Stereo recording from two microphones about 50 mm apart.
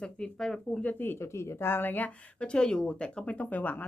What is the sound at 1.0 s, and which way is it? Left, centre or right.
Speech, left.